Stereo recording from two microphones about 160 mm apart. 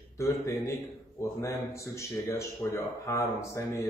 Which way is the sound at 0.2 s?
15° left (ahead or behind).